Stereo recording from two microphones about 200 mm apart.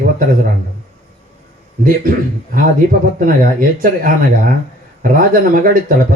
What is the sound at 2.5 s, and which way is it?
Speech, 45° right (ahead or behind).